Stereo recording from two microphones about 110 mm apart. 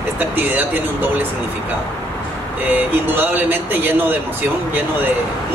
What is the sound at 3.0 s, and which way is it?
A man's voice, 20° right (ahead or behind).